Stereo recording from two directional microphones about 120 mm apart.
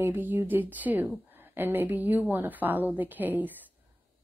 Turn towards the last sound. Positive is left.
turn(degrees=-15)  # may be behind; listen again after turning